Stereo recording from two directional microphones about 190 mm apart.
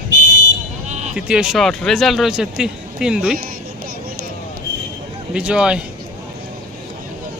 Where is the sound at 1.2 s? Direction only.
5° right (ahead or behind).